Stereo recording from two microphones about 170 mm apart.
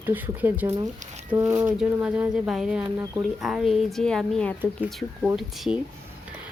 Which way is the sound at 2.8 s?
20° right (ahead or behind).